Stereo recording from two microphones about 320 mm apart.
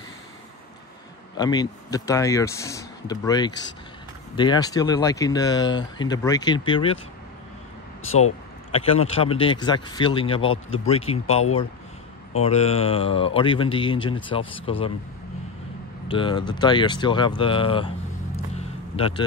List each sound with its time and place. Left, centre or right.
1.3 s speech: centre
8.7 s speech: centre
16.1 s speech: centre